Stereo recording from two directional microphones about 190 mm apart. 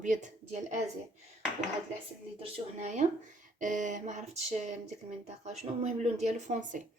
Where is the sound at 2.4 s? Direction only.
35° right (ahead or behind).